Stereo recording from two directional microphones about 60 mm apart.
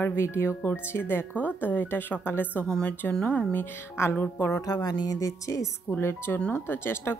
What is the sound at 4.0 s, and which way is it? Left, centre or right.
Speech, left.